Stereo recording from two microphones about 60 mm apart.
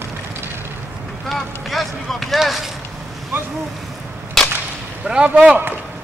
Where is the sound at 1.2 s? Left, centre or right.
Centre.